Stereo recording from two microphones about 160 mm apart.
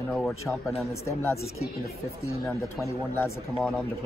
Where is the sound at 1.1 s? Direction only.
15° left (ahead or behind).